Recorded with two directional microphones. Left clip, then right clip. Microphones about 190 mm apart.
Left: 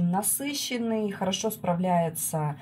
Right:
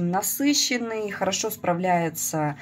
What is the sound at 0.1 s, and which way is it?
Speech, 30° right (ahead or behind).